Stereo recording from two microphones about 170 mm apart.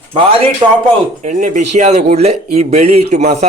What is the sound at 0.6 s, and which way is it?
Speech, 30° right (ahead or behind).